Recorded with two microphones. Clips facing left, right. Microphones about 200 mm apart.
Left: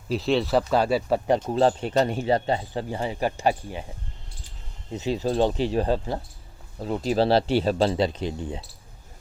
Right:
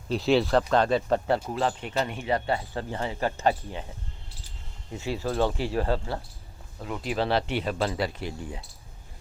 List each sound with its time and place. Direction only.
0.1 s speech: centre (ahead or behind)
1.5 s speech: 30° left (ahead or behind)
2.9 s speech: 15° left (ahead or behind)
4.9 s speech: 20° left (ahead or behind)
6.7 s speech: 35° left (ahead or behind)